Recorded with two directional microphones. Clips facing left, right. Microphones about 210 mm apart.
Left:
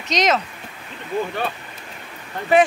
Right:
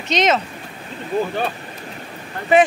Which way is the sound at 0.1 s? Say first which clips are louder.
Right 2 dB; centre (ahead or behind).